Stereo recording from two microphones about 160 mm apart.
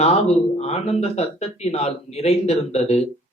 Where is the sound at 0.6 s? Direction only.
40° left (ahead or behind).